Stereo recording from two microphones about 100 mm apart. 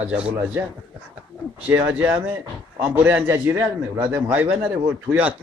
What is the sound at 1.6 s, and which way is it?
A man's voice, 15° right (ahead or behind).